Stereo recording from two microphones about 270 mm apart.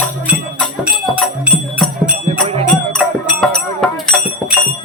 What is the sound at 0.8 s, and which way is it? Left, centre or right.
Music, centre.